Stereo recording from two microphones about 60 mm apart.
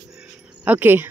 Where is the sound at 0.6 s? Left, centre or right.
Right.